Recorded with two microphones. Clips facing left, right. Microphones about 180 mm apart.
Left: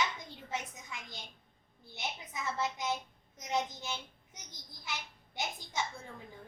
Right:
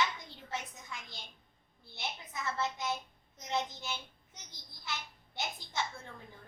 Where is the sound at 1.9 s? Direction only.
15° left (ahead or behind).